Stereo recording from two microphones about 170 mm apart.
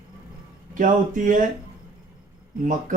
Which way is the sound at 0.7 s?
50° right (ahead or behind).